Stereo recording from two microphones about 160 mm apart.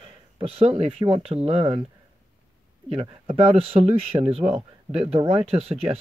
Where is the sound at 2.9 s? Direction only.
40° right (ahead or behind).